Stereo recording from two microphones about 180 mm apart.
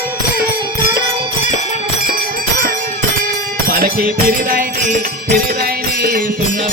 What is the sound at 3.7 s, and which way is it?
Music, 55° right (ahead or behind).